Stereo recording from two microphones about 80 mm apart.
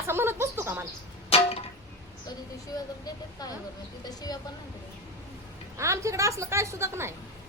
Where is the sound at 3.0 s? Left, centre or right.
Left.